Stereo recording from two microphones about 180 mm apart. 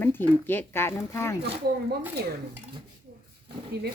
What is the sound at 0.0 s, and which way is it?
A woman's voice, 10° left (ahead or behind).